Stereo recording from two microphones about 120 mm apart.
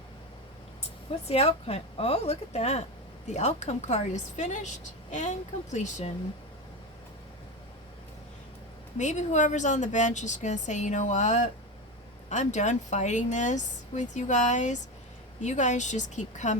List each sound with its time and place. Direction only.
1.3 s a woman's voice: 55° left (ahead or behind)
9.0 s a woman's voice: 85° left